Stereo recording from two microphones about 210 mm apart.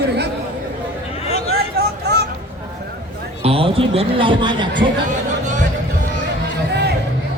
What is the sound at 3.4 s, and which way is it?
A man's voice, 25° right (ahead or behind).